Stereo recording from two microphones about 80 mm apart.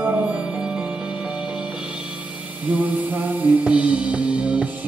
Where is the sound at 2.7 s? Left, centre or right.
Centre.